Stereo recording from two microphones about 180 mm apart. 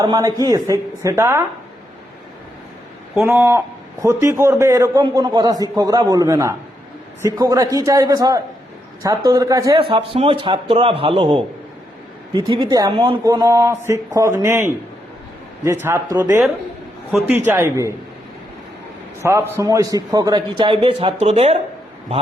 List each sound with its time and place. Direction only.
0.0 s a woman's voice: 20° right (ahead or behind)
4.0 s a woman's voice: 15° right (ahead or behind)
19.2 s speech: 15° right (ahead or behind); by 21.6 s 35° right (ahead or behind)